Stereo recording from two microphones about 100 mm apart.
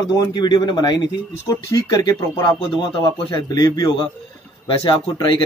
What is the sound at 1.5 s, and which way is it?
Speech, 35° left (ahead or behind).